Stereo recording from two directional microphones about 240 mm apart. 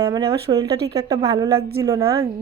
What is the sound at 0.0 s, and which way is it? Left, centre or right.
A woman's voice, centre.